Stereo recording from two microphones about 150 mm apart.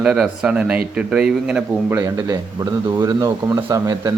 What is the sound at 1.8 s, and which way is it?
A man's voice, 15° right (ahead or behind).